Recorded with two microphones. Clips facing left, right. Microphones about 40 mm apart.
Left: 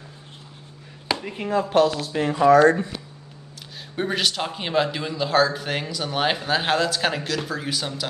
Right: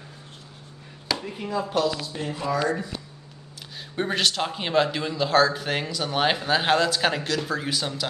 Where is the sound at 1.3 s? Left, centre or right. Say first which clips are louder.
Left 8 dB; left.